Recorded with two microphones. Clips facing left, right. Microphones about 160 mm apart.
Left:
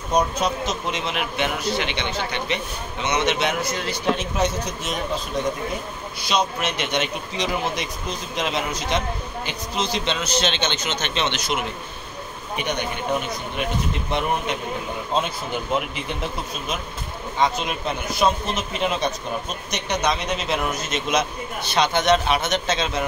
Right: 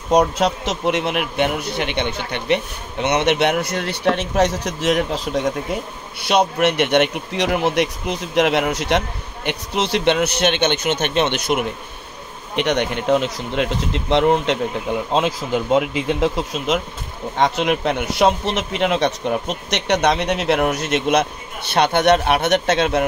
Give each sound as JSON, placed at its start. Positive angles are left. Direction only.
{"t": 0.1, "sound": "a man's voice", "side_deg": -80}
{"t": 6.2, "sound": "a man's voice", "side_deg": -65}
{"t": 12.5, "sound": "speech", "side_deg": -85}
{"t": 17.4, "sound": "speech", "side_deg": -75}